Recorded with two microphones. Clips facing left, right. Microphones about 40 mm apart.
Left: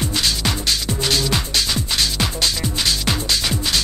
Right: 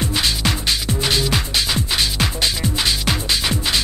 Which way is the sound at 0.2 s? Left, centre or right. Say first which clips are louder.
Right 1 dB; centre.